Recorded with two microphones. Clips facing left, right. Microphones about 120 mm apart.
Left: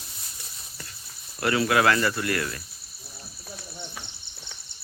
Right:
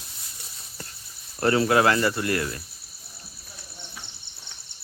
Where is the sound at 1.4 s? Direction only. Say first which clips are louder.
Right 2 dB; 30° right (ahead or behind).